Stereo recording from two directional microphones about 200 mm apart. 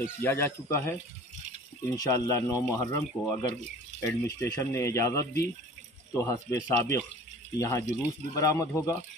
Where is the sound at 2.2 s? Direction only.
15° left (ahead or behind).